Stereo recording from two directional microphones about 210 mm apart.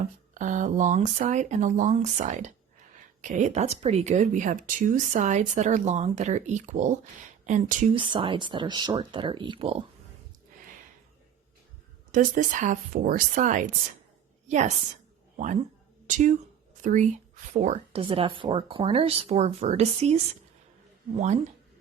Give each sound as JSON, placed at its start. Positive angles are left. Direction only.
{"t": 0.0, "sound": "speech", "side_deg": -35}
{"t": 7.9, "sound": "speech", "side_deg": -25}
{"t": 12.1, "sound": "a woman's voice", "side_deg": -35}
{"t": 16.0, "sound": "speech", "side_deg": -35}